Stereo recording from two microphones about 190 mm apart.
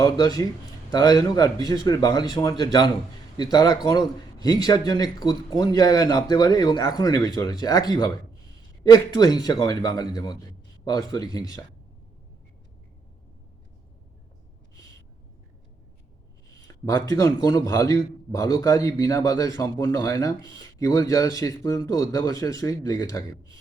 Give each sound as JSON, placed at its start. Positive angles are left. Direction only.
{"t": 0.0, "sound": "a man's voice", "side_deg": 20}
{"t": 16.6, "sound": "a man's voice", "side_deg": 20}